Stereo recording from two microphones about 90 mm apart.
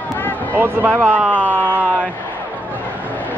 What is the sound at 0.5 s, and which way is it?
Speech, 20° right (ahead or behind).